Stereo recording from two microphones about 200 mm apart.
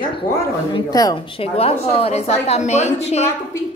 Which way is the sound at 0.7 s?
20° left (ahead or behind).